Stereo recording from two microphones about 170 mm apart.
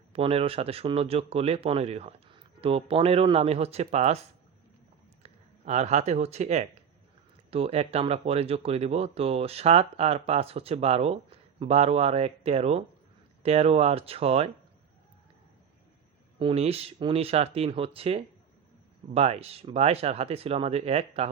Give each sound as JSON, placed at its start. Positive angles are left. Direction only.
{"t": 0.1, "sound": "speech", "side_deg": -35}
{"t": 5.2, "sound": "speech", "side_deg": -40}
{"t": 16.4, "sound": "speech", "side_deg": -35}